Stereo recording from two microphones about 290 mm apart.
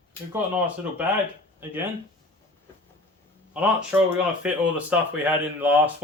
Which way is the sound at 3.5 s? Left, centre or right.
Centre.